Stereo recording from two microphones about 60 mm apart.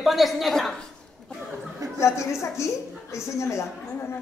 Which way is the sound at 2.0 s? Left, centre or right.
Left.